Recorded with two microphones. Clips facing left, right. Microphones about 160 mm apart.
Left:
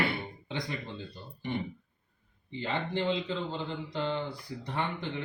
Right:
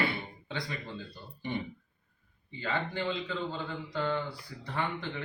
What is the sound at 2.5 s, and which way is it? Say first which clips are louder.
A man's voice: left 1 dB; 20° left (ahead or behind).